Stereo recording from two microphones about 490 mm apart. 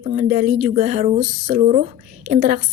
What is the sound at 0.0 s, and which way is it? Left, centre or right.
Speech, centre.